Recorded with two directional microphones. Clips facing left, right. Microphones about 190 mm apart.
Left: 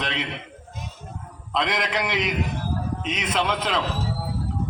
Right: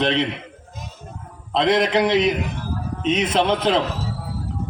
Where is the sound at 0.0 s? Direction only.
30° right (ahead or behind).